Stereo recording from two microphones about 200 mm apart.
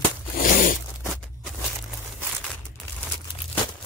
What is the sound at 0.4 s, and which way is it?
Zipper, 45° left (ahead or behind).